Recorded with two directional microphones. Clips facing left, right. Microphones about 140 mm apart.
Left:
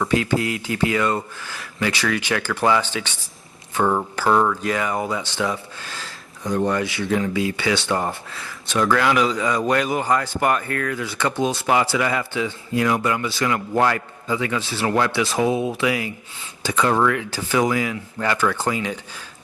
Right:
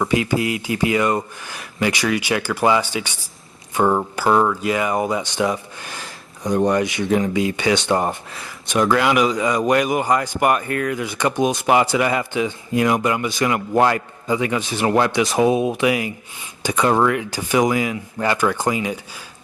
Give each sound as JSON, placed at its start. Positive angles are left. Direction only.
{"t": 0.0, "sound": "speech", "side_deg": -15}